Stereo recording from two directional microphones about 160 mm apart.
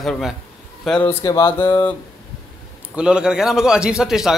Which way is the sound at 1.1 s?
20° left (ahead or behind).